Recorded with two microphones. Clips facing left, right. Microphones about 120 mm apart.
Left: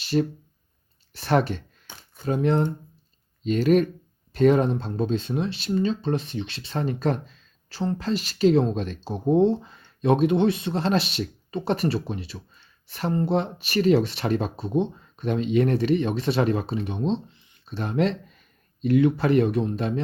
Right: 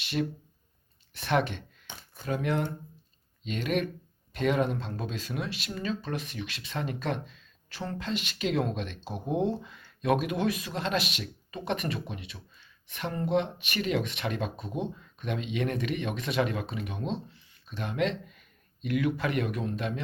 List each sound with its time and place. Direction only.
0.0 s speech: 35° left (ahead or behind)
17.7 s speech: 35° left (ahead or behind)